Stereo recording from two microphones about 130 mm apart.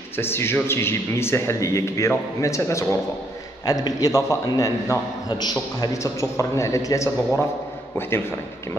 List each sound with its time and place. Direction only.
0.2 s a man's voice: 20° left (ahead or behind)